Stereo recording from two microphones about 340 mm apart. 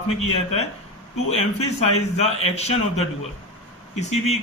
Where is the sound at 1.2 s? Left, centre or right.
Centre.